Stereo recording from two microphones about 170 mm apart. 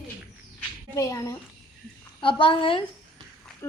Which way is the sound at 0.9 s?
20° left (ahead or behind).